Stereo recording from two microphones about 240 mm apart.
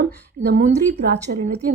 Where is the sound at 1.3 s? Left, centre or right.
Right.